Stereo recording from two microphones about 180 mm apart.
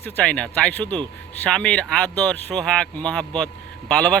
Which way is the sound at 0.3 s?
5° left (ahead or behind).